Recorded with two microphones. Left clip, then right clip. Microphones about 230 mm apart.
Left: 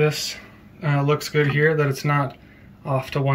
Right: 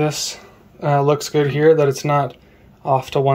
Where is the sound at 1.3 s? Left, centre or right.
Centre.